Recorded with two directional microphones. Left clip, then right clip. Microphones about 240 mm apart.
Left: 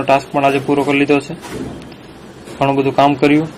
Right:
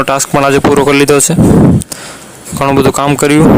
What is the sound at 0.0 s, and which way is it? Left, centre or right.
Speech, right.